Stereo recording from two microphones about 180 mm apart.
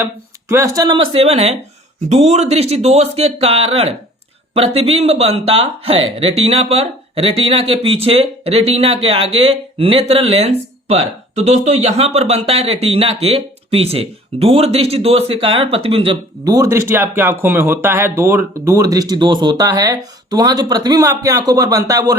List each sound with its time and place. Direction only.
0.0 s speech: 15° right (ahead or behind)